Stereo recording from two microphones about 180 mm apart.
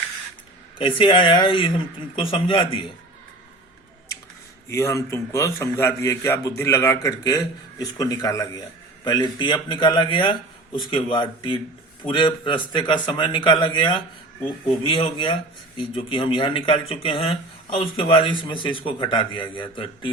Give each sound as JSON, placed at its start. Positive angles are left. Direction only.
{"t": 0.8, "sound": "a man's voice", "side_deg": 30}
{"t": 4.7, "sound": "a man's voice", "side_deg": 15}